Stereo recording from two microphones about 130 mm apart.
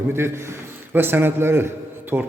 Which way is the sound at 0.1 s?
20° right (ahead or behind).